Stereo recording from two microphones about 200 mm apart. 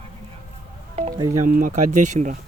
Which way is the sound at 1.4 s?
45° right (ahead or behind).